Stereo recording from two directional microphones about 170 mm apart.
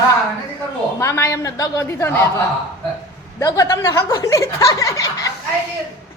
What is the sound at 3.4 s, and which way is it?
Speech, 20° left (ahead or behind).